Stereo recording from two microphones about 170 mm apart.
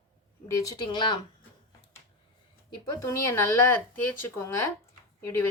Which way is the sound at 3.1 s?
15° left (ahead or behind).